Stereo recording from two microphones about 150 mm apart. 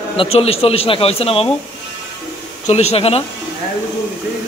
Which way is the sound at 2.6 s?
45° left (ahead or behind).